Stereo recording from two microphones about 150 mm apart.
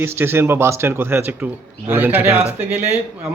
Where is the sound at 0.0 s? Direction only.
15° right (ahead or behind).